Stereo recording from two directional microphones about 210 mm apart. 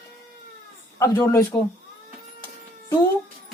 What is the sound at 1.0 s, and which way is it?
Speech, 15° left (ahead or behind).